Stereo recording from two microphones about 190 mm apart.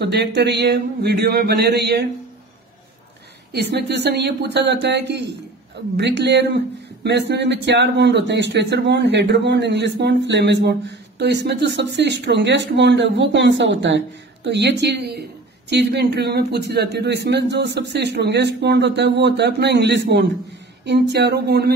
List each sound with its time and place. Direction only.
0.0 s speech: 60° right (ahead or behind)
3.5 s speech: 60° right (ahead or behind)